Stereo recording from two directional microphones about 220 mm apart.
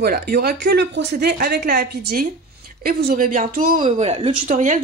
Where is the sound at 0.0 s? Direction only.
45° right (ahead or behind).